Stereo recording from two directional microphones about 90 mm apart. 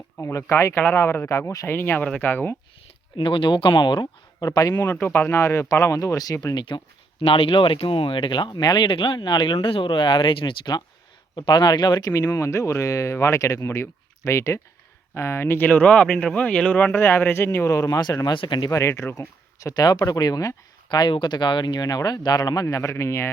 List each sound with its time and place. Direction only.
0.2 s speech: 35° left (ahead or behind)
3.2 s speech: 70° left (ahead or behind); by 4.7 s 45° left (ahead or behind)
4.7 s speech: 25° left (ahead or behind); by 10.8 s 70° left (ahead or behind)
11.3 s speech: 55° left (ahead or behind)
12.3 s speech: 35° left (ahead or behind); by 16.9 s 10° left (ahead or behind)
16.9 s speech: 25° left (ahead or behind); by 18.7 s 55° left (ahead or behind)
18.7 s speech: 30° left (ahead or behind)
19.5 s speech: 45° left (ahead or behind)
20.9 s speech: 60° left (ahead or behind); by 23.3 s 30° left (ahead or behind)